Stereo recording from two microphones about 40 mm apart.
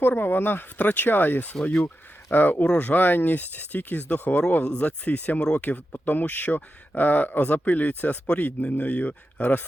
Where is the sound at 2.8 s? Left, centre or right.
Left.